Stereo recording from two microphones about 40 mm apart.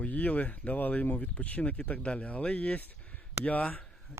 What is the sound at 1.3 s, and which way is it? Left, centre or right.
Speech, left.